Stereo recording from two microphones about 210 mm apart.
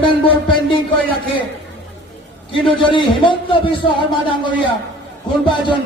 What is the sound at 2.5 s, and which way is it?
A man's voice, 25° left (ahead or behind).